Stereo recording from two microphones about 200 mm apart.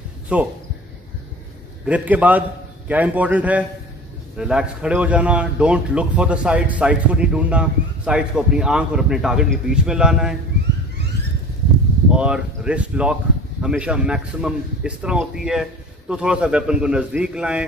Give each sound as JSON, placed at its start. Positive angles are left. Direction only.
{"t": 0.3, "sound": "a man's voice", "side_deg": -5}
{"t": 1.9, "sound": "a man's voice", "side_deg": -5}
{"t": 12.1, "sound": "speech", "side_deg": -5}